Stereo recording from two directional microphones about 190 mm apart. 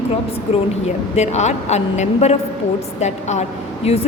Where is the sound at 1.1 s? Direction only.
35° left (ahead or behind).